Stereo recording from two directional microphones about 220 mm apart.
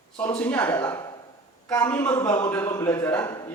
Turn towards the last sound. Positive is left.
turn(degrees=10)  # may be behind; listen again after turning